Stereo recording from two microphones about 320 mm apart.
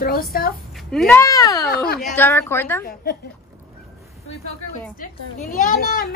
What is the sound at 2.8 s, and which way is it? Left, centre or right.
Speech, left.